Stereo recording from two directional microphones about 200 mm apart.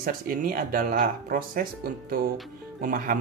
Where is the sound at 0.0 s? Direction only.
45° right (ahead or behind).